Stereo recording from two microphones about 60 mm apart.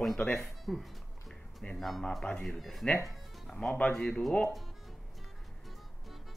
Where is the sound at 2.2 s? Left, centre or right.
Left.